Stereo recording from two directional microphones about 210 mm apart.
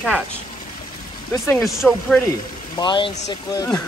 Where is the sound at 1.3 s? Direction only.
15° left (ahead or behind).